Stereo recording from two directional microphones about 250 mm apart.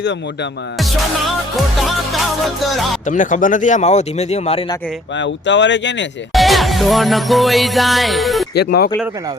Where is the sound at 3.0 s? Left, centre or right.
Left.